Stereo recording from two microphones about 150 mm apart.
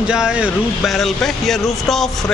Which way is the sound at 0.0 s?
5° right (ahead or behind).